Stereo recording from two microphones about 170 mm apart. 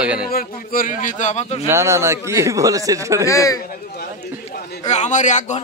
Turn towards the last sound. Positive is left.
turn(degrees=45)  # may be behind; listen again after turning